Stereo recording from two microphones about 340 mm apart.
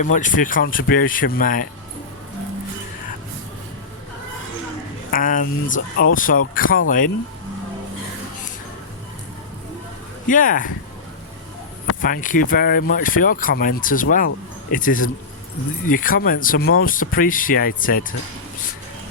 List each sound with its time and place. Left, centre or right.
0.0 s speech: left
5.1 s speech: left
10.2 s speech: left
12.0 s speech: left